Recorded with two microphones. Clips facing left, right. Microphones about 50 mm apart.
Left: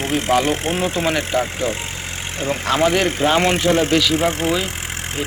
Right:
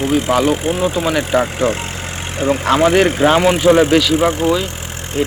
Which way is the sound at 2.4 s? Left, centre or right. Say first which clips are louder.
Right 5 dB; centre.